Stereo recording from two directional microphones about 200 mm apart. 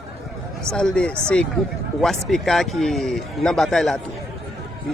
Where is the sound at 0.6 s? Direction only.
5° left (ahead or behind).